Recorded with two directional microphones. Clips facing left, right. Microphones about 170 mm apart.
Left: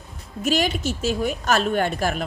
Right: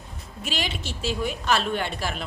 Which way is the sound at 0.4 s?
45° left (ahead or behind).